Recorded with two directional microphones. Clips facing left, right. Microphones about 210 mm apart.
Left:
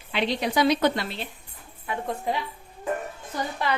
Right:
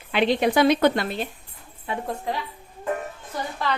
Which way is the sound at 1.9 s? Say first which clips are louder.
Right 2 dB; 25° right (ahead or behind).